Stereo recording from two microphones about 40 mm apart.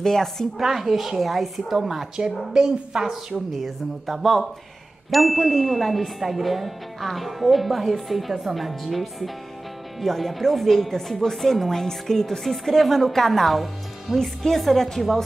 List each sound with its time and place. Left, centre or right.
0.0 s speech: centre
0.6 s a woman's voice: centre
2.1 s a woman's voice: centre
3.5 s speech: centre